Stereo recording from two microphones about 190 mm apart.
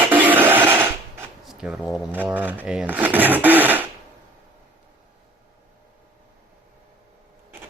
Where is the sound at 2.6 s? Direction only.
5° right (ahead or behind).